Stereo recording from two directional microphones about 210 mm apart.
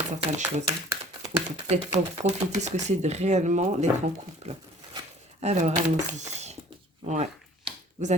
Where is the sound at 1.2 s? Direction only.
30° right (ahead or behind).